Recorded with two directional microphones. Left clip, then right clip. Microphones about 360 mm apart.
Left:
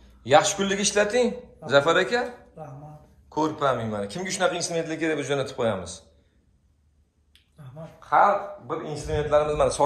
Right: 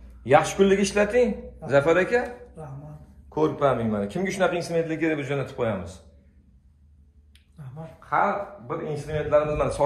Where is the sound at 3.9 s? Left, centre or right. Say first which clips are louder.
Right 2 dB; centre.